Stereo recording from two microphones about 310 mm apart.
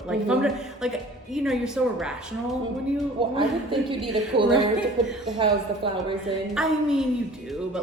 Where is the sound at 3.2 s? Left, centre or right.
Centre.